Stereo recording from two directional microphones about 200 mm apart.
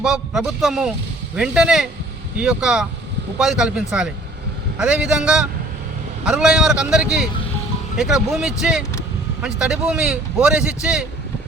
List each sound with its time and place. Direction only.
0.0 s a man's voice: centre (ahead or behind)